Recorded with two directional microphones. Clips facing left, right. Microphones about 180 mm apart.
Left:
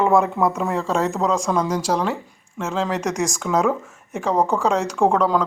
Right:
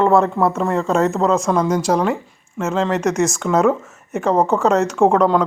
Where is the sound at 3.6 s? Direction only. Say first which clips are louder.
Right 5 dB; 5° right (ahead or behind).